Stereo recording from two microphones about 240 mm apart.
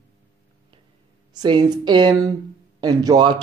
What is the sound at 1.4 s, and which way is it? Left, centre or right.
Speech, centre.